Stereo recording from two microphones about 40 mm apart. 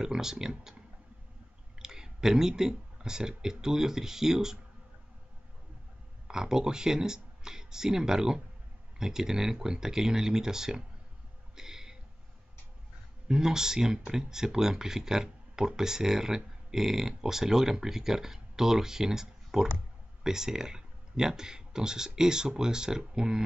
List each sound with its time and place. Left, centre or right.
0.0 s speech: centre
1.8 s speech: centre
6.2 s speech: centre
11.5 s a sound: centre
13.3 s speech: centre